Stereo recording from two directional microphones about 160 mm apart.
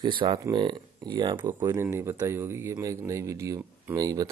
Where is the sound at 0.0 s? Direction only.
30° right (ahead or behind).